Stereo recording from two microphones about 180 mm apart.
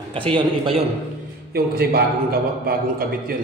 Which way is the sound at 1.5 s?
60° right (ahead or behind).